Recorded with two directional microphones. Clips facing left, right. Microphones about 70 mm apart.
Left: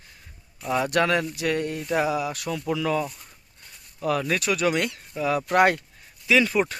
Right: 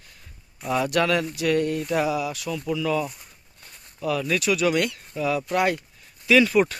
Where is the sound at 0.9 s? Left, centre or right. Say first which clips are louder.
Left 1 dB; left.